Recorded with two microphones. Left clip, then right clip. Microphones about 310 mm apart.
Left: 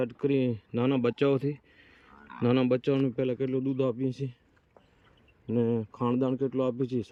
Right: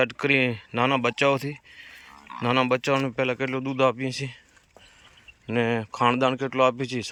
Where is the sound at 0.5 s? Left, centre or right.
Centre.